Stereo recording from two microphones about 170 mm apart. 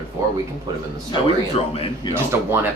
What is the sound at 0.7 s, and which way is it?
Speech, 20° right (ahead or behind).